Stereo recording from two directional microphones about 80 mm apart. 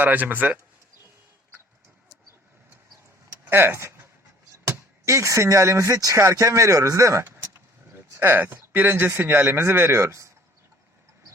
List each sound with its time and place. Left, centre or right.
0.0 s speech: right
3.5 s speech: right